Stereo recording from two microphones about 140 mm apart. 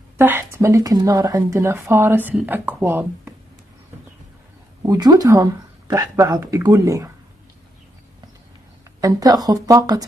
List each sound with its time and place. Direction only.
0.2 s speech: 15° right (ahead or behind)
4.8 s speech: 30° right (ahead or behind)
9.0 s speech: 25° right (ahead or behind)